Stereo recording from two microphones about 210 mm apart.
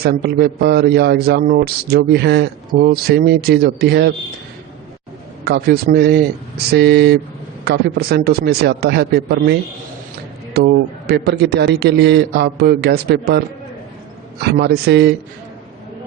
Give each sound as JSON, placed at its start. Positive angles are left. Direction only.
{"t": 0.0, "sound": "a man's voice", "side_deg": -50}
{"t": 5.5, "sound": "a man's voice", "side_deg": -50}
{"t": 14.4, "sound": "a man's voice", "side_deg": -50}